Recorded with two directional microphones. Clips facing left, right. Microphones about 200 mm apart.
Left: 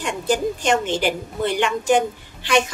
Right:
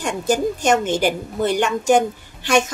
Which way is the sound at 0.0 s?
45° right (ahead or behind).